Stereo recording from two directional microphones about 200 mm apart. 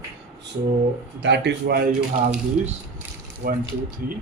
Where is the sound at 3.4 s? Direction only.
45° right (ahead or behind).